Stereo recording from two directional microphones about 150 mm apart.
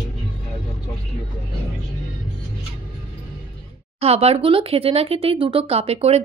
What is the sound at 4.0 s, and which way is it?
Speech, 40° right (ahead or behind).